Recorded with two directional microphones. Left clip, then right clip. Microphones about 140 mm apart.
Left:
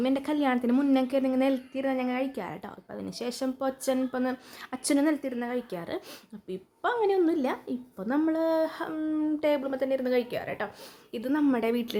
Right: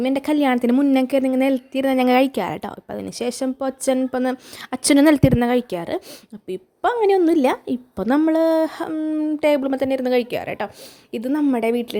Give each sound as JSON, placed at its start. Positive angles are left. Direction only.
{"t": 0.0, "sound": "speech", "side_deg": -55}
{"t": 1.3, "sound": "speech", "side_deg": -50}
{"t": 1.7, "sound": "a woman's voice", "side_deg": -85}
{"t": 9.4, "sound": "a woman's voice", "side_deg": -65}
{"t": 11.3, "sound": "speech", "side_deg": -35}